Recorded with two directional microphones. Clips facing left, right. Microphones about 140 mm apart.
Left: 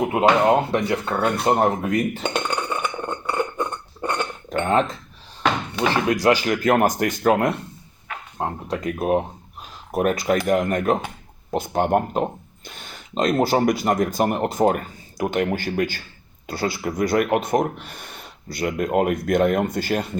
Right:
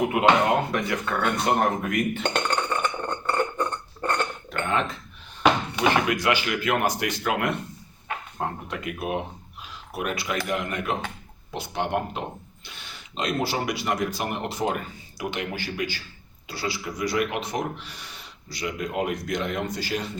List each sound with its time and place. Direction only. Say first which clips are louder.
0.1 s speech: left 4 dB; 30° left (ahead or behind)
2.3 s a sound: left 1 dB; 5° left (ahead or behind)
4.4 s cutlery: left 10 dB; 40° left (ahead or behind)
6.1 s speech: left 6 dB; 35° left (ahead or behind); by 20.1 s 50° left (ahead or behind)